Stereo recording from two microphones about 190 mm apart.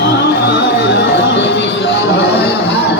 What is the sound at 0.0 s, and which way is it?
Music, 60° left (ahead or behind).